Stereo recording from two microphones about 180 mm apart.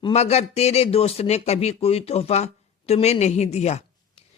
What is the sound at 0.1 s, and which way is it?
A man's voice, 35° left (ahead or behind).